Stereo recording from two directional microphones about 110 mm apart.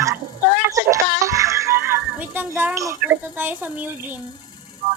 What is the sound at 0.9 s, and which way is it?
Music, 30° right (ahead or behind).